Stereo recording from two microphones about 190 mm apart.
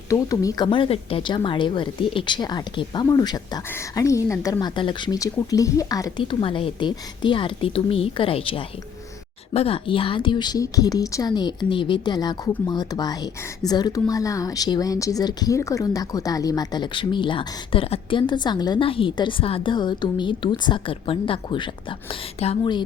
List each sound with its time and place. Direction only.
0.1 s a woman's voice: 20° left (ahead or behind)